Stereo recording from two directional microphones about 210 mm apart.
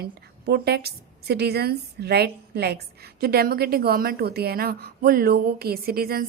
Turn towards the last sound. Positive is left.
turn(degrees=-45)  # may be behind; listen again after turning